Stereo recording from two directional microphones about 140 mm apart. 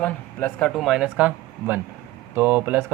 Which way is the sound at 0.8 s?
5° right (ahead or behind).